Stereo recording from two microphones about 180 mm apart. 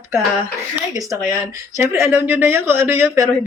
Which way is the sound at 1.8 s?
15° right (ahead or behind).